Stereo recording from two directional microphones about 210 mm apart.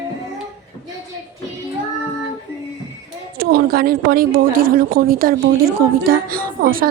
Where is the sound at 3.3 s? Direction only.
45° right (ahead or behind).